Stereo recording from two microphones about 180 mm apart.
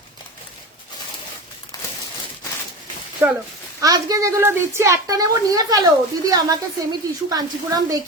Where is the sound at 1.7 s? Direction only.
20° left (ahead or behind).